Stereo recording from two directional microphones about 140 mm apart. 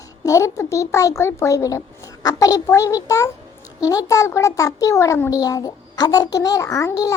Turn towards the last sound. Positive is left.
turn(degrees=25)  # may be behind; listen again after turning